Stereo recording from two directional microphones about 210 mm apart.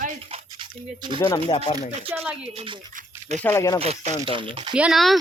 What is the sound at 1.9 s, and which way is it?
Speech, 30° right (ahead or behind).